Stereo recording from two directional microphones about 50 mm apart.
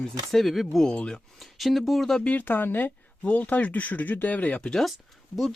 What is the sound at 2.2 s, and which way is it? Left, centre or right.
Speech, left.